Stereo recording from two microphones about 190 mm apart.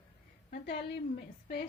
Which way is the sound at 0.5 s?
60° left (ahead or behind).